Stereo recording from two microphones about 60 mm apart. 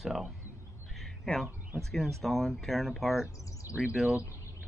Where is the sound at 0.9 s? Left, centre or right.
Centre.